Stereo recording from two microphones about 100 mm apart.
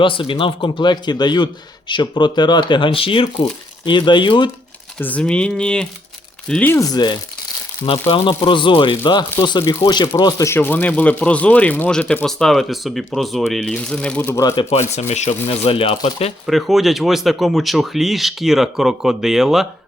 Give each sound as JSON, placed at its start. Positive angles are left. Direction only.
{"t": 0.0, "sound": "speech", "side_deg": 60}
{"t": 3.8, "sound": "speech", "side_deg": 50}
{"t": 4.9, "sound": "speech", "side_deg": 15}
{"t": 6.7, "sound": "speech", "side_deg": 35}
{"t": 8.0, "sound": "speech", "side_deg": 60}
{"t": 10.6, "sound": "speech", "side_deg": 15}
{"t": 14.6, "sound": "speech", "side_deg": 90}
{"t": 15.4, "sound": "speech", "side_deg": 75}
{"t": 16.0, "sound": "speech", "side_deg": 90}
{"t": 16.5, "sound": "speech", "side_deg": 0}